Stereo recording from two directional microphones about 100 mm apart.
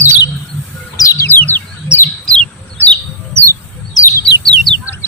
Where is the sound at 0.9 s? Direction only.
35° left (ahead or behind).